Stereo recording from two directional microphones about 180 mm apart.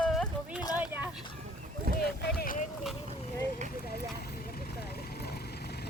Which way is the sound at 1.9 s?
60° left (ahead or behind).